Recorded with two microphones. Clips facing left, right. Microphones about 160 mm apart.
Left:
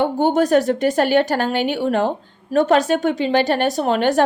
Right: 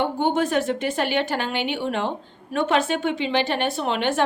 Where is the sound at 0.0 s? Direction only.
40° left (ahead or behind).